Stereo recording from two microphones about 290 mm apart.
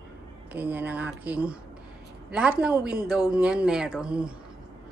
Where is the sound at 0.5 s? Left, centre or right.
Centre.